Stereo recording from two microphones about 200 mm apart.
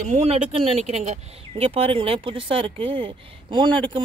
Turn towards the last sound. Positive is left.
turn(degrees=-25)  # may be behind; listen again after turning